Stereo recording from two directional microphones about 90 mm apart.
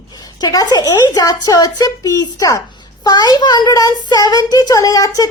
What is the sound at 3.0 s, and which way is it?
A child's voice, 50° left (ahead or behind).